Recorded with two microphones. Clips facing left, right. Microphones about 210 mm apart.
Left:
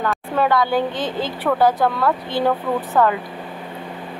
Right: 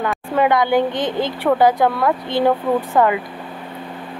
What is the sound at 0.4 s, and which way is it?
Speech, 20° right (ahead or behind).